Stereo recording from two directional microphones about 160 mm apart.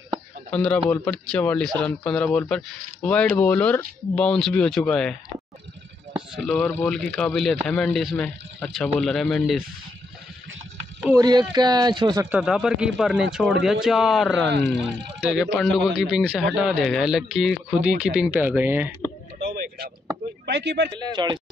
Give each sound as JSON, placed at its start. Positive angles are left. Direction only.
{"t": 0.5, "sound": "speech", "side_deg": 5}
{"t": 6.3, "sound": "speech", "side_deg": 5}
{"t": 11.1, "sound": "speech", "side_deg": -25}
{"t": 12.3, "sound": "speech", "side_deg": 0}
{"t": 20.4, "sound": "speech", "side_deg": -90}
{"t": 20.9, "sound": "speech", "side_deg": -25}